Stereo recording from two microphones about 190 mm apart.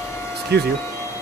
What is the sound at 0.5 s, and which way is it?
Speech, 60° right (ahead or behind).